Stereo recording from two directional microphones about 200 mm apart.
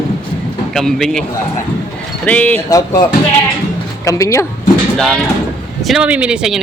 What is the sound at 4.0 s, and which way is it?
Speech, 15° left (ahead or behind).